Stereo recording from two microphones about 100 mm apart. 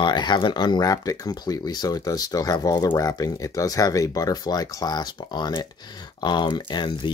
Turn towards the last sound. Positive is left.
turn(degrees=50)  # may be behind; listen again after turning